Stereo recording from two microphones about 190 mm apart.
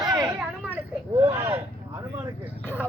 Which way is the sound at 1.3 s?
10° right (ahead or behind).